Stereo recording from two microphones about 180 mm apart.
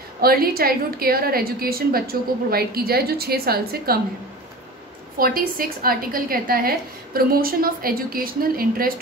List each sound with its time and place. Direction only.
0.2 s a woman's voice: 55° right (ahead or behind)
5.2 s a woman's voice: 55° right (ahead or behind)